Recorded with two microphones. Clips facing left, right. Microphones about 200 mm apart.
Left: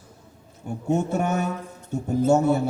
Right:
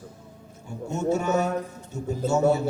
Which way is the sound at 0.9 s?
55° left (ahead or behind).